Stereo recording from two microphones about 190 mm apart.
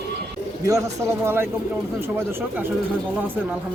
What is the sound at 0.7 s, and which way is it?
Speech, 15° right (ahead or behind).